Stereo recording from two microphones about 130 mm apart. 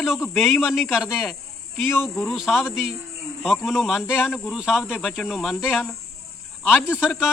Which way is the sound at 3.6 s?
Centre (ahead or behind).